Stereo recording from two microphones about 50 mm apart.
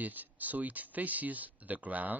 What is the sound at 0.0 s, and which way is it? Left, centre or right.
A man's voice, right.